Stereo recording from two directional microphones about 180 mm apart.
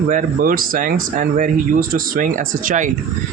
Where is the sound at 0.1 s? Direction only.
50° right (ahead or behind).